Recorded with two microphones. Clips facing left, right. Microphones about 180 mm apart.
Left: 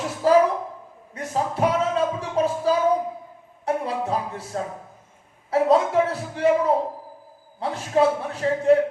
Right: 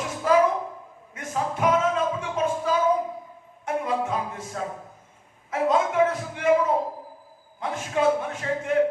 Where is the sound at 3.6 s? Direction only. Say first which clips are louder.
Left 1 dB; 35° left (ahead or behind).